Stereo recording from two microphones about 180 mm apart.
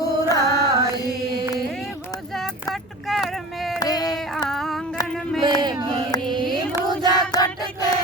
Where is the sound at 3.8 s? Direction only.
20° left (ahead or behind).